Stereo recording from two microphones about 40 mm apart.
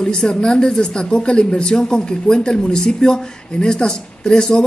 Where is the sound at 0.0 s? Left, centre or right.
Left.